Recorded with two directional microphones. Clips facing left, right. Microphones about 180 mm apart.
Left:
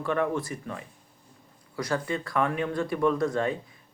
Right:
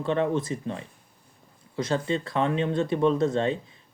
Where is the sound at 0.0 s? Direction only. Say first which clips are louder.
Right 2 dB; 25° right (ahead or behind).